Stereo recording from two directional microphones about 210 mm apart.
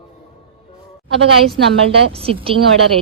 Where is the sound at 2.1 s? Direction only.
25° right (ahead or behind).